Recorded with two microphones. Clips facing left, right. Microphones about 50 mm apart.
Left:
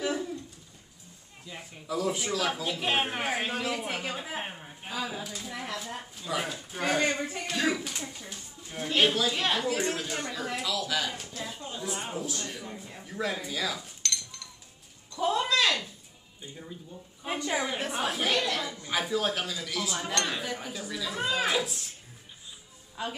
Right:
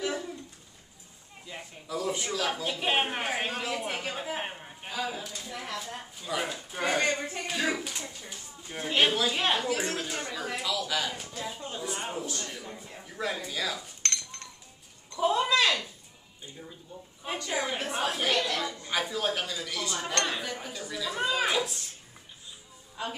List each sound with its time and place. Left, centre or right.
1.9 s speech: centre
8.6 s speech: centre
10.3 s speech: centre
11.4 s speech: centre
14.0 s a sound: right
15.1 s speech: centre
17.4 s a woman's voice: centre
17.7 s a woman's voice: centre
23.0 s speech: centre